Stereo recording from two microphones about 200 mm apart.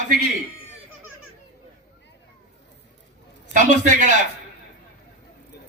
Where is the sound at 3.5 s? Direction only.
40° right (ahead or behind).